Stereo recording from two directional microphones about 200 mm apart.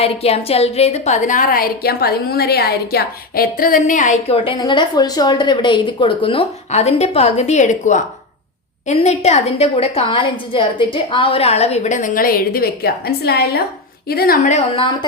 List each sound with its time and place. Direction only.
0.0 s a woman's voice: 30° left (ahead or behind)